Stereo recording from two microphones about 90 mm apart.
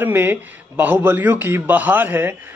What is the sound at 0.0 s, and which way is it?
A man's voice, 25° right (ahead or behind).